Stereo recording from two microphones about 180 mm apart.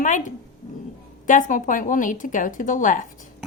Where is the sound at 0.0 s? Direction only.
45° left (ahead or behind).